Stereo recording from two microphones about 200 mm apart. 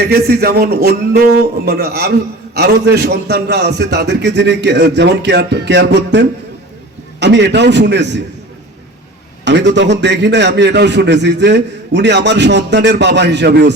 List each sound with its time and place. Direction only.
0.0 s a man's voice: 50° right (ahead or behind)
9.4 s a man's voice: 60° right (ahead or behind)